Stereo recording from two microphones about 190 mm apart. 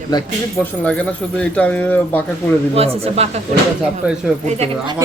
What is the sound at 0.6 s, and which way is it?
Speech, 5° left (ahead or behind).